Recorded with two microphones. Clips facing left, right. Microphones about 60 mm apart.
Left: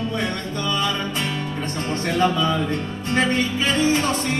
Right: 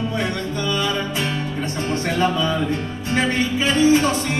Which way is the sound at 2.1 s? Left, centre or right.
Centre.